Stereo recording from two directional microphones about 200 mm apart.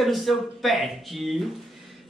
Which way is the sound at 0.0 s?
Centre (ahead or behind).